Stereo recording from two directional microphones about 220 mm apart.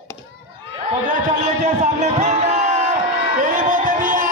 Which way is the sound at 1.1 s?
35° right (ahead or behind).